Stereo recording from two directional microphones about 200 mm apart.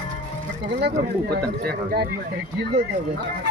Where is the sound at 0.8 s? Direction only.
55° right (ahead or behind).